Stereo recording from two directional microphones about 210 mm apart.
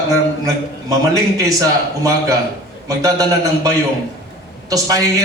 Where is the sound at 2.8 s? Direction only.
15° right (ahead or behind).